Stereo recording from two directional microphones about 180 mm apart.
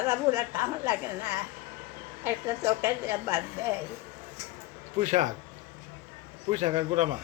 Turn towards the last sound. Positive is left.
turn(degrees=-35)  # may be behind; listen again after turning